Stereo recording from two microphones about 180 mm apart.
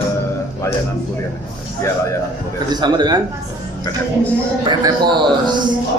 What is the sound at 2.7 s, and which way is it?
Speech, 25° right (ahead or behind).